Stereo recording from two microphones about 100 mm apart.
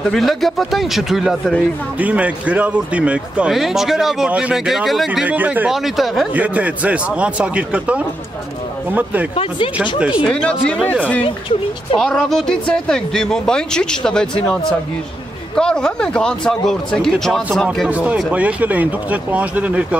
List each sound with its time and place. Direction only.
0.0 s speech: 5° left (ahead or behind)
2.0 s speech: 15° right (ahead or behind)
5.3 s speech: 15° right (ahead or behind)
5.7 s speech: centre (ahead or behind)
6.3 s speech: 15° right (ahead or behind)
9.3 s speech: 70° left (ahead or behind)
9.9 s speech: 10° right (ahead or behind)
10.2 s speech: 10° left (ahead or behind)
11.2 s speech: 60° left (ahead or behind)
12.0 s speech: 5° left (ahead or behind)
17.8 s speech: 15° right (ahead or behind)